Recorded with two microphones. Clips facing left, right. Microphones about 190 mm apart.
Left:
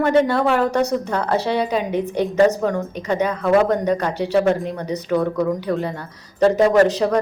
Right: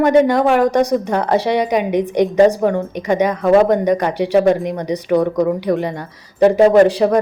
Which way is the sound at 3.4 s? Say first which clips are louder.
Right 4 dB; 35° right (ahead or behind).